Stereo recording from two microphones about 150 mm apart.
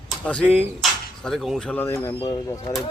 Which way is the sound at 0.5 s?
5° left (ahead or behind).